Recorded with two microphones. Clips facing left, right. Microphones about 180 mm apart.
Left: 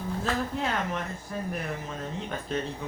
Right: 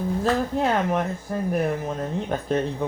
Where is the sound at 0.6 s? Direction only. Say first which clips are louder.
Right 8 dB; 50° right (ahead or behind).